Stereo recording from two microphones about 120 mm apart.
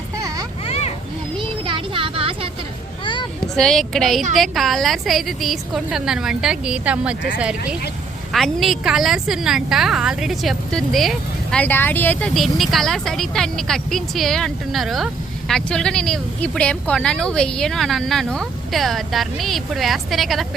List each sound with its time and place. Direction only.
0.6 s children playing: 60° left (ahead or behind)
1.4 s a sound: 45° right (ahead or behind)
3.0 s a sound: 40° left (ahead or behind)
3.5 s a woman's voice: 5° left (ahead or behind)
11.6 s speech: 15° left (ahead or behind)
12.3 s a woman's voice: centre (ahead or behind)